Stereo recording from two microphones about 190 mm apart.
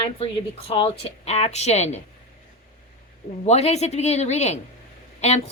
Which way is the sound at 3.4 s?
35° left (ahead or behind).